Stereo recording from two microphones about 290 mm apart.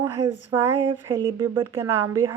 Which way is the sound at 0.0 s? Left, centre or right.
Centre.